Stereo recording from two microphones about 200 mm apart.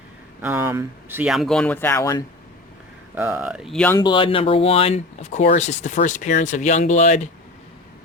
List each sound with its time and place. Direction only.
0.4 s speech: 10° right (ahead or behind); by 2.2 s 15° left (ahead or behind)
3.2 s speech: 10° right (ahead or behind)
3.9 s speech: 25° left (ahead or behind)